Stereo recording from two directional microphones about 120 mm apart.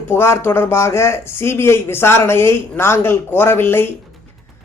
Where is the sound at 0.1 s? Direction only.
20° left (ahead or behind).